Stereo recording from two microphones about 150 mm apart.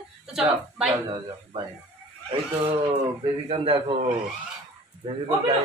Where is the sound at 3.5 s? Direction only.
35° right (ahead or behind).